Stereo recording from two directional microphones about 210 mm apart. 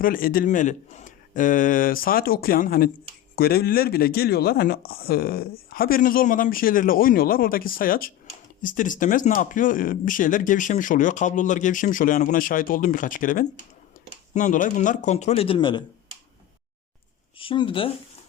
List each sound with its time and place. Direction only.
0.0 s speech: 45° left (ahead or behind); by 15.8 s 25° left (ahead or behind)
17.3 s speech: 25° left (ahead or behind)